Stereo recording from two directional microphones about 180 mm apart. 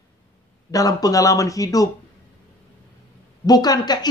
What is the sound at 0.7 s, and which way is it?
Speech, 20° left (ahead or behind).